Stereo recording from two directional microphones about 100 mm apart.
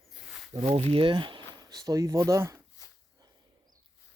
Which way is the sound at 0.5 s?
70° right (ahead or behind).